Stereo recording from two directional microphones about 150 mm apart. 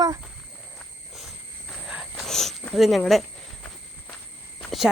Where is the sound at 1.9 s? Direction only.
5° right (ahead or behind).